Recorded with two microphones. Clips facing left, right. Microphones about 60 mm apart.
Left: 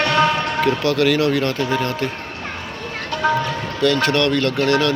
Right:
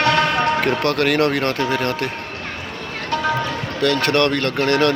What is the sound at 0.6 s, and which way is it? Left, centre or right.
Speech, right.